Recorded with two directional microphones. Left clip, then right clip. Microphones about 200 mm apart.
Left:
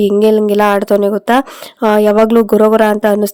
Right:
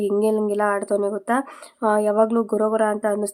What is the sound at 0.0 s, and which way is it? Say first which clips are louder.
Speech: left 10 dB; 40° left (ahead or behind).